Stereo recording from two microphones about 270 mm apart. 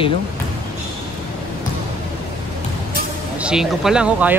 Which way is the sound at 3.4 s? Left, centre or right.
Centre.